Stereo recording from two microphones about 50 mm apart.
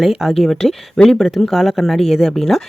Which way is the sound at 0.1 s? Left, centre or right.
Centre.